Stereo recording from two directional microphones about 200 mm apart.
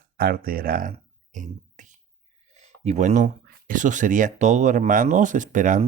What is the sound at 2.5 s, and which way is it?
Speech, 30° right (ahead or behind).